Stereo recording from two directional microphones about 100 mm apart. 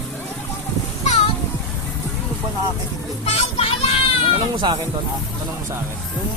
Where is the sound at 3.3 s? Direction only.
90° left.